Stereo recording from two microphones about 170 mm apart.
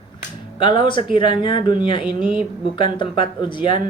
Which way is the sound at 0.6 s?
30° left (ahead or behind).